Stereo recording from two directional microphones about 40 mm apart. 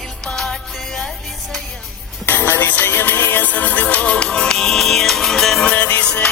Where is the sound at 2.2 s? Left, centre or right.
Left.